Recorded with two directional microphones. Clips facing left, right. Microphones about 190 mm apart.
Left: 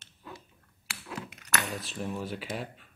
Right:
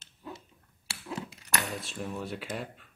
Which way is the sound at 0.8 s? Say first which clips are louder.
Right 2 dB; 25° right (ahead or behind).